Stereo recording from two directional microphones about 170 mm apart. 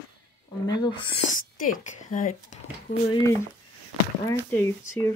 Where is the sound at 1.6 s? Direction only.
50° left (ahead or behind).